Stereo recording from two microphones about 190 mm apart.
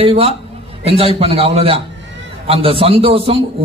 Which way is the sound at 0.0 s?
30° right (ahead or behind).